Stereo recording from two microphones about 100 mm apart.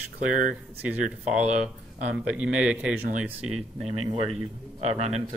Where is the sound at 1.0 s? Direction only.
10° right (ahead or behind).